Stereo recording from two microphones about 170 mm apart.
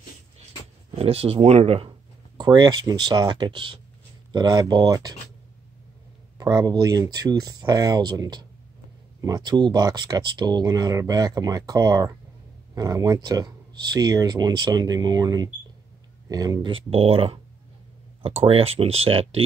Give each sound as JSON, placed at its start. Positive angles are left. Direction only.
{"t": 0.9, "sound": "speech", "side_deg": -35}
{"t": 6.3, "sound": "speech", "side_deg": -20}